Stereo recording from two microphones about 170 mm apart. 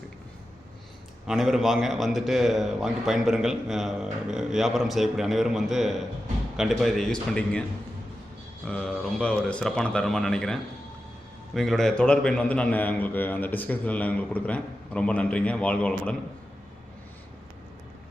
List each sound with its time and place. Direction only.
1.3 s a man's voice: centre (ahead or behind)
8.6 s a man's voice: 5° left (ahead or behind)